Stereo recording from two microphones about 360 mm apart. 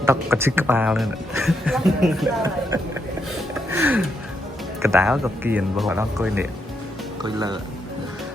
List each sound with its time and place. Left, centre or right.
0.0 s speech: centre
3.7 s music: centre
4.8 s speech: centre